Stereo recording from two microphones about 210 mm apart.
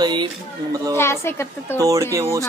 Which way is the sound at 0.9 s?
10° left (ahead or behind).